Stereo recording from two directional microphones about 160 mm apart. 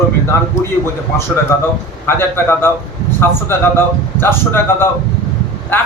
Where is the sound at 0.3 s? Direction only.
15° left (ahead or behind).